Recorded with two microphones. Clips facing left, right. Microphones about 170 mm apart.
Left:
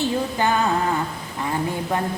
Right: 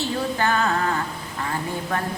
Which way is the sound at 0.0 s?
15° left (ahead or behind).